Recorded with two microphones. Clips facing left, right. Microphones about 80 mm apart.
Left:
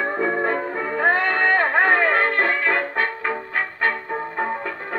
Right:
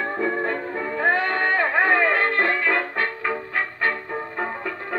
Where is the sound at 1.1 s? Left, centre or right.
Left.